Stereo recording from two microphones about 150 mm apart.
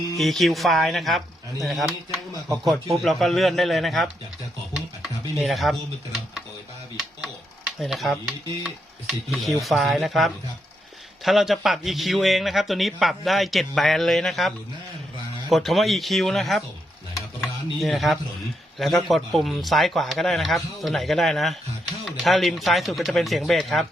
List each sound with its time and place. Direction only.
0.2 s a man's voice: centre (ahead or behind)
2.3 s speech: 25° right (ahead or behind)
2.9 s a man's voice: centre (ahead or behind)
7.8 s a man's voice: centre (ahead or behind)
17.7 s a man's voice: centre (ahead or behind)